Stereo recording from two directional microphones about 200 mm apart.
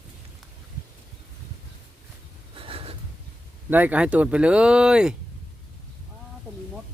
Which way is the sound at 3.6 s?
10° right (ahead or behind).